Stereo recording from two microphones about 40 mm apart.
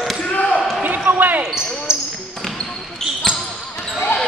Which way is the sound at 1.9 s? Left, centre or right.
Centre.